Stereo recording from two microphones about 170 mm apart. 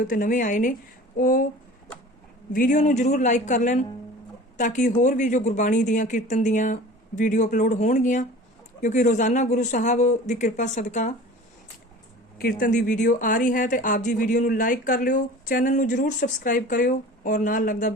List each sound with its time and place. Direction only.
0.1 s speech: 50° left (ahead or behind)
2.5 s speech: 50° left (ahead or behind)
12.4 s speech: 60° left (ahead or behind)